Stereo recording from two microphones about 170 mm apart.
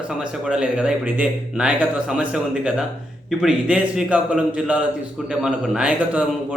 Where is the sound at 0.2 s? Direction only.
5° right (ahead or behind).